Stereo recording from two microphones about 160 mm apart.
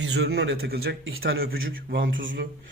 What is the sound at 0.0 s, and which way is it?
A man's voice, 90° right.